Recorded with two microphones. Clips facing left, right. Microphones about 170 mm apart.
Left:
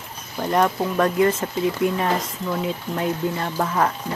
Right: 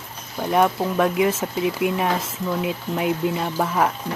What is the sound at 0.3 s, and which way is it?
Speech, 5° right (ahead or behind).